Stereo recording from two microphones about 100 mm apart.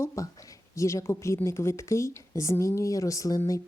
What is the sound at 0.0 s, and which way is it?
A woman's voice, 30° left (ahead or behind).